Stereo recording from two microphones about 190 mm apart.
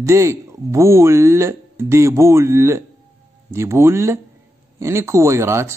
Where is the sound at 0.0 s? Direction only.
15° right (ahead or behind).